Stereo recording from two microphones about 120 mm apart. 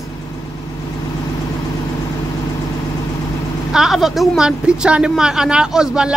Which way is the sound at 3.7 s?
5° right (ahead or behind).